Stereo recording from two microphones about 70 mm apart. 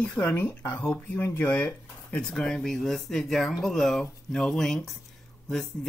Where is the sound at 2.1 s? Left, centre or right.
Centre.